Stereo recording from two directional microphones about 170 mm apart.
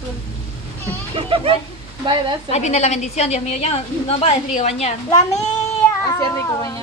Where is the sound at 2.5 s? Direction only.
40° left (ahead or behind).